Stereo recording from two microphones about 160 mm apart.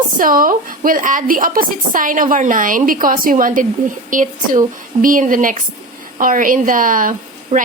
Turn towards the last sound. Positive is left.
turn(degrees=-55)  # may be behind; listen again after turning